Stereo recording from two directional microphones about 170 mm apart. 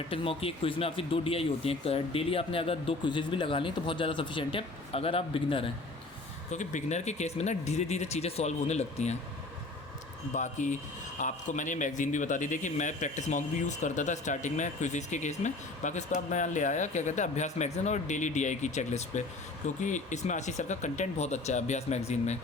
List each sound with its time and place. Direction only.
0.1 s speech: 35° left (ahead or behind)
6.5 s speech: 45° left (ahead or behind)
10.3 s a man's voice: 45° left (ahead or behind)